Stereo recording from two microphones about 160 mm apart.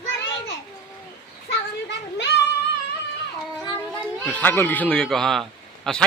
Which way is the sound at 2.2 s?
90° left.